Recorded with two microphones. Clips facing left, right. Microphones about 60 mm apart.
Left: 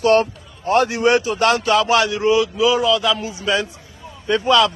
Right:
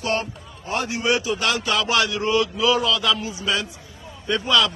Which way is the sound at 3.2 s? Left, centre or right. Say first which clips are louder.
Left 4 dB; left.